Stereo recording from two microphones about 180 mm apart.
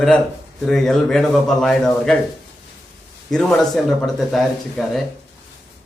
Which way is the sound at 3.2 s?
5° left (ahead or behind).